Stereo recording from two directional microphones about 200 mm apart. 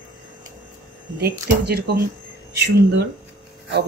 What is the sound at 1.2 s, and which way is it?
Speech, 50° right (ahead or behind).